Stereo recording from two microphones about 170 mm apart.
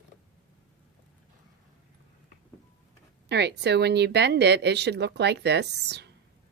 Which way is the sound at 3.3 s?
80° right.